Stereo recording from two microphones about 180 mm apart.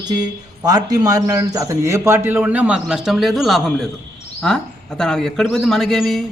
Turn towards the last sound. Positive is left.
turn(degrees=0)  # may be behind; listen again after turning